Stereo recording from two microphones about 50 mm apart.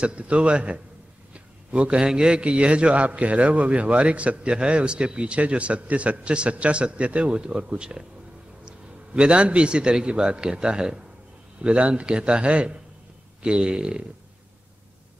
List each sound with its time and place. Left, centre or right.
0.0 s a man's voice: right
1.3 s a sound: right
2.0 s a man's voice: centre